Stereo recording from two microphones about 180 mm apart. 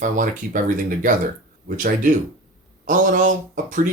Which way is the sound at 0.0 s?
45° right (ahead or behind).